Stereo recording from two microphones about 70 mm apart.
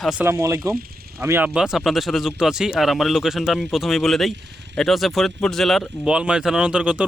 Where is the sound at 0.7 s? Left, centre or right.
Right.